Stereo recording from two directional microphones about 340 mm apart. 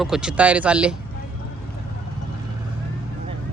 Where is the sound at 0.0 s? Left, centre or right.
Centre.